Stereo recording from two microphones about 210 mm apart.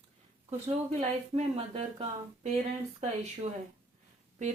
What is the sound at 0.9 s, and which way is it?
Speech, 30° right (ahead or behind).